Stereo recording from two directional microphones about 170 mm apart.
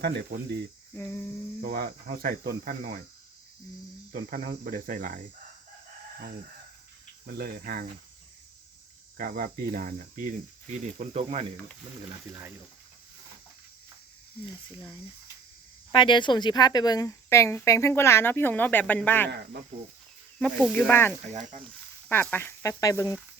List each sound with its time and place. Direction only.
0.0 s cricket: 70° right (ahead or behind)
0.9 s speech: 15° left (ahead or behind)
1.6 s cricket: 60° right (ahead or behind)
4.1 s cricket: 55° right (ahead or behind)
7.3 s cricket: 65° right (ahead or behind)
9.1 s speech: 60° right (ahead or behind); by 11.5 s 35° right (ahead or behind)
12.0 s speech: 20° right (ahead or behind)
15.9 s speech: 30° left (ahead or behind); by 19.3 s 10° left (ahead or behind)
20.4 s speech: 5° left (ahead or behind)